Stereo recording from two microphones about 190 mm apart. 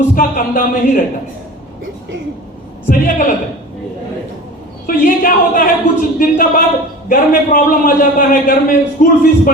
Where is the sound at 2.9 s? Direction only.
45° left (ahead or behind).